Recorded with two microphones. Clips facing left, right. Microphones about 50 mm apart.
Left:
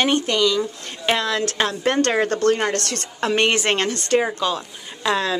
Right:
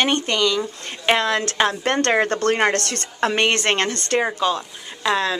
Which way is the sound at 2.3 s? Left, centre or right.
Right.